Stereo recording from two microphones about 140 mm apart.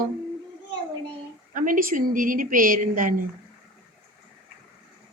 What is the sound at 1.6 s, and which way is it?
A woman's voice, 75° right (ahead or behind).